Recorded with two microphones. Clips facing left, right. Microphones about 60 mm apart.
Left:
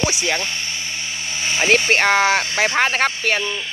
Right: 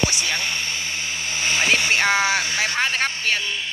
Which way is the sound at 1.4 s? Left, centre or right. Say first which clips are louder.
Left 1 dB; centre.